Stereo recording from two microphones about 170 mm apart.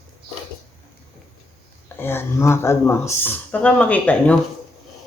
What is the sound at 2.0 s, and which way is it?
Speech, 15° left (ahead or behind).